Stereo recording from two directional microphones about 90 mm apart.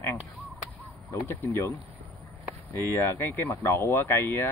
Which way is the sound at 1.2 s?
25° left (ahead or behind).